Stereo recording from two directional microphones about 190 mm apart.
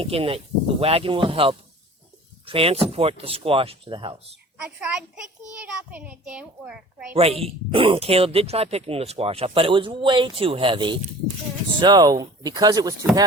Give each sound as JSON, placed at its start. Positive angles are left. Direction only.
{"t": 0.0, "sound": "speech", "side_deg": -30}
{"t": 4.6, "sound": "a child's voice", "side_deg": -5}
{"t": 7.1, "sound": "speech", "side_deg": -30}